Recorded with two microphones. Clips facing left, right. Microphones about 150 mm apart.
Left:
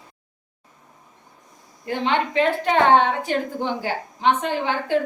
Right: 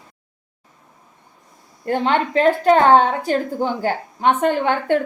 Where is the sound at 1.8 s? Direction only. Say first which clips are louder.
Right 4 dB; 50° right (ahead or behind).